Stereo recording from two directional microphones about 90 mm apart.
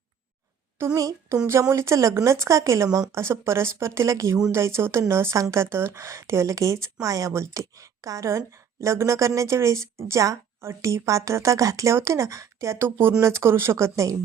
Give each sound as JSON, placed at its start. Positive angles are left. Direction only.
{"t": 0.9, "sound": "a woman's voice", "side_deg": -40}